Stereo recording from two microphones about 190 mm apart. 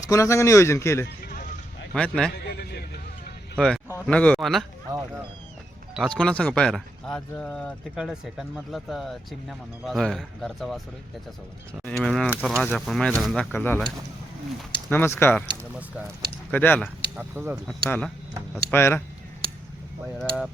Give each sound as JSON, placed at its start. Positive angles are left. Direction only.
{"t": 0.1, "sound": "speech", "side_deg": 15}
{"t": 1.9, "sound": "speech", "side_deg": 5}
{"t": 2.3, "sound": "music", "side_deg": 55}
{"t": 4.0, "sound": "speech", "side_deg": 5}
{"t": 5.9, "sound": "speech", "side_deg": 5}
{"t": 11.9, "sound": "speech", "side_deg": 5}
{"t": 14.8, "sound": "speech", "side_deg": 10}
{"t": 16.5, "sound": "speech", "side_deg": 10}
{"t": 17.2, "sound": "speech", "side_deg": -10}
{"t": 17.7, "sound": "speech", "side_deg": 5}
{"t": 20.1, "sound": "speech", "side_deg": 5}